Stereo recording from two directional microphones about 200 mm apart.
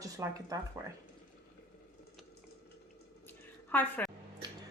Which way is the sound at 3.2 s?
10° left (ahead or behind).